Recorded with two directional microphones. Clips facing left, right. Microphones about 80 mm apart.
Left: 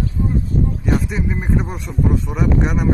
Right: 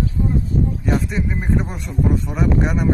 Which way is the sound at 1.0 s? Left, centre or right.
Centre.